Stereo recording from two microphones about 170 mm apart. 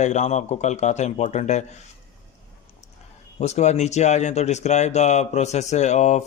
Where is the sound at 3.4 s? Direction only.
40° left (ahead or behind).